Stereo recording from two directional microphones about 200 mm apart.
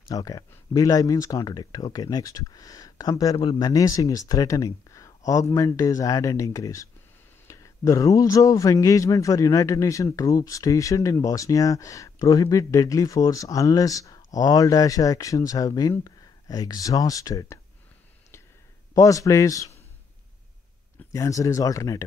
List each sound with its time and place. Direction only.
0.1 s speech: 15° left (ahead or behind)
18.9 s speech: 15° left (ahead or behind)
21.1 s speech: 15° left (ahead or behind)